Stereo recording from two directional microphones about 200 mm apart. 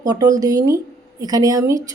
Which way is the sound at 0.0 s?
20° right (ahead or behind).